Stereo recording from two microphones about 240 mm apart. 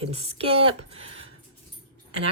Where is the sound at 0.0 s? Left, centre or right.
Right.